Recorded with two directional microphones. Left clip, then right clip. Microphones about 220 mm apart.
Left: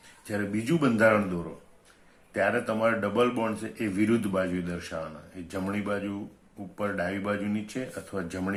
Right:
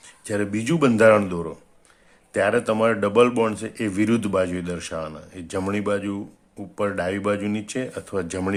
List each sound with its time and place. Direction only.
0.3 s speech: 50° right (ahead or behind)